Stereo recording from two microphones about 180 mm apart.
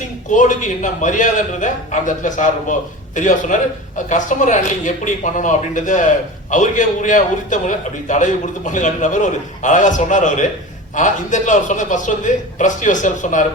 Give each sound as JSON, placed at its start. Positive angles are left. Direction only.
{"t": 0.3, "sound": "a man's voice", "side_deg": 45}